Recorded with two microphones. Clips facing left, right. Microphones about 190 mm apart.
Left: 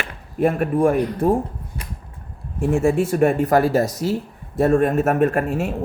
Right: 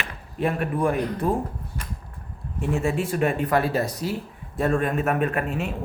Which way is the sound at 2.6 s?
50° left (ahead or behind).